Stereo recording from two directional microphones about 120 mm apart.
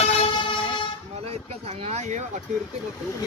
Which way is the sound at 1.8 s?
60° right (ahead or behind).